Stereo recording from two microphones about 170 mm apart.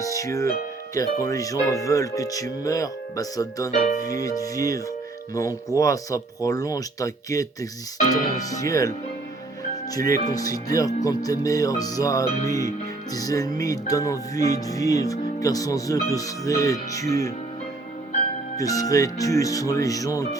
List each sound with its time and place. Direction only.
0.0 s music: 20° left (ahead or behind)
0.9 s speech: 20° left (ahead or behind)
3.7 s speech: 45° left (ahead or behind)
4.0 s speech: 20° left (ahead or behind)
9.9 s speech: 20° left (ahead or behind)
18.5 s speech: 20° left (ahead or behind)